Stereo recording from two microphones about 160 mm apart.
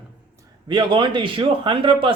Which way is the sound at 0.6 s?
30° right (ahead or behind).